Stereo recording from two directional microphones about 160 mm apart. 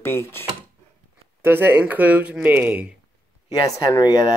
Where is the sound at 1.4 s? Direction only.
15° right (ahead or behind).